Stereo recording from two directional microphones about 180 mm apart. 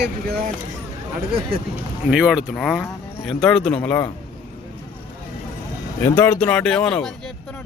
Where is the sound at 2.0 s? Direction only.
5° right (ahead or behind); by 4.1 s 10° left (ahead or behind).